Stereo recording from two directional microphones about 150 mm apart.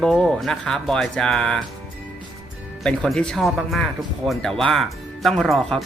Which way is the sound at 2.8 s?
5° left (ahead or behind).